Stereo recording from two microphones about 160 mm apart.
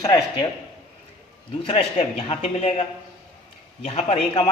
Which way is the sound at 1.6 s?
35° left (ahead or behind).